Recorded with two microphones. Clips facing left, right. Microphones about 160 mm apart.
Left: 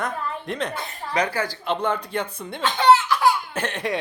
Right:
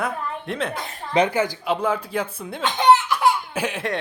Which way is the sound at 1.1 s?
20° right (ahead or behind).